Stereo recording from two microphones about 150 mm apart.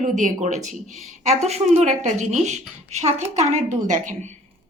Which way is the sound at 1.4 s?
45° right (ahead or behind).